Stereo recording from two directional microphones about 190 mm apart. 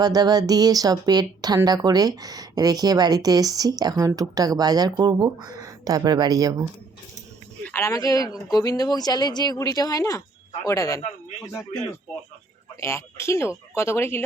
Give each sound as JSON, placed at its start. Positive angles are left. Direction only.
{"t": 0.0, "sound": "a woman's voice", "side_deg": -20}
{"t": 7.6, "sound": "speech", "side_deg": 10}
{"t": 12.8, "sound": "speech", "side_deg": 15}